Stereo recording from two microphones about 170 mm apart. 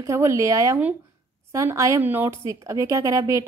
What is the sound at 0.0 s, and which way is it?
A woman's voice, 15° right (ahead or behind).